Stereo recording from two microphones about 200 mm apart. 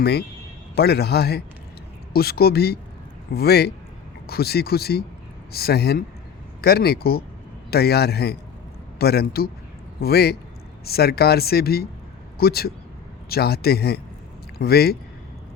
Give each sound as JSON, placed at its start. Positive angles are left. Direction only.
{"t": 0.0, "sound": "speech", "side_deg": 55}